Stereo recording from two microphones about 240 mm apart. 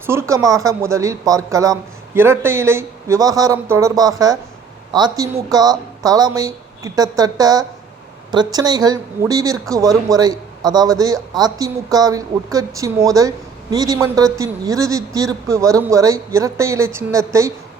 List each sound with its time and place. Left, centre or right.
0.0 s speech: centre